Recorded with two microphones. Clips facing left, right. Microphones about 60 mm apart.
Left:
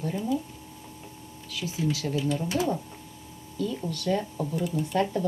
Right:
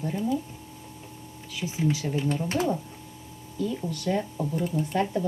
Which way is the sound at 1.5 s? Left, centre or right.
Right.